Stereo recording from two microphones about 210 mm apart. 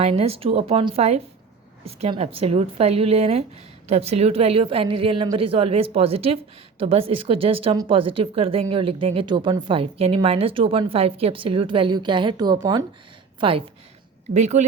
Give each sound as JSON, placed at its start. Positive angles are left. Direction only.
{"t": 0.0, "sound": "a woman's voice", "side_deg": -30}